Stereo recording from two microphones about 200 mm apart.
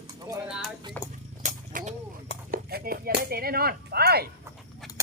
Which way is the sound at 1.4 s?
40° right (ahead or behind).